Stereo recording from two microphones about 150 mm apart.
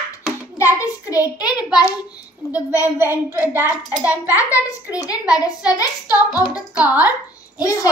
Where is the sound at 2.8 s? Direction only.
15° right (ahead or behind).